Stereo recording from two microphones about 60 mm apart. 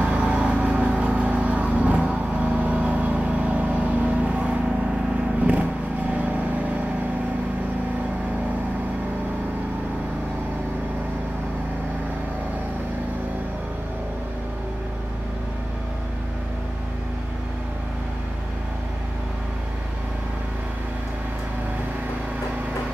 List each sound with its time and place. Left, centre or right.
0.0 s vehicle: centre
6.1 s vehicle: right